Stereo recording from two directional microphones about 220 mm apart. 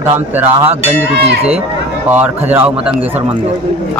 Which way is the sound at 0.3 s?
10° right (ahead or behind).